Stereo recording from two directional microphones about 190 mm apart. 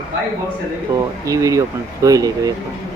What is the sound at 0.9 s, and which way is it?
Speech, 15° right (ahead or behind).